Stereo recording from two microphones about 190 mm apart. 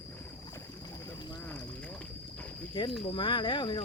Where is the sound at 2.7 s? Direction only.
25° left (ahead or behind).